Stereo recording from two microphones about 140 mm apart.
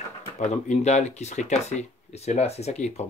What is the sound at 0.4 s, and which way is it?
Speech, 55° left (ahead or behind).